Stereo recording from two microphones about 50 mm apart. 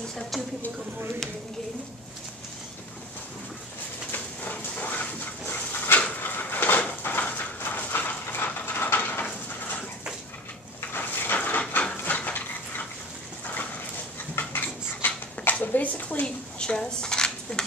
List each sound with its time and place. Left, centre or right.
4.1 s dog: left
6.2 s a sound: left
10.9 s a sound: left
12.0 s dog: left
14.3 s dog: left
16.5 s dishes: centre